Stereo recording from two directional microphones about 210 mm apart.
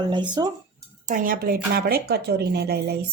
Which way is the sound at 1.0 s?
40° right (ahead or behind).